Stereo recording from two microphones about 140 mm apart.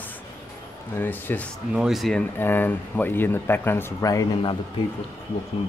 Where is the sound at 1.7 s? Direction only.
5° right (ahead or behind).